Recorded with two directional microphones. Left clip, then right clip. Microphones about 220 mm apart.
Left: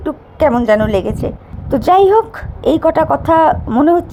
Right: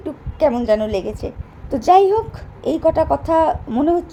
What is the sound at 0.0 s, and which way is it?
A woman's voice, 15° left (ahead or behind).